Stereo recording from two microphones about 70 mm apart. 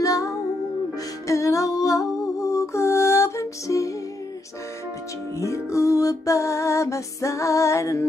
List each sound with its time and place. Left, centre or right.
0.0 s music: left
5.4 s music: left